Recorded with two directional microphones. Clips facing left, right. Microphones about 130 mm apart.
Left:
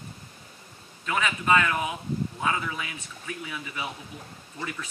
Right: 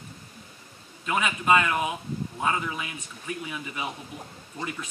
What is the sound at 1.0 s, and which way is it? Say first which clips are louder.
A man's voice: right 1 dB; 15° right (ahead or behind).